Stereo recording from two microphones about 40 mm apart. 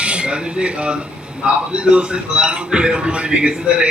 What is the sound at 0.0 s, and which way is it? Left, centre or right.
Speech, right.